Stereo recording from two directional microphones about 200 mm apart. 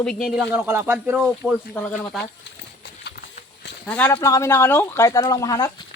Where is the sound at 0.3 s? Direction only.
5° right (ahead or behind).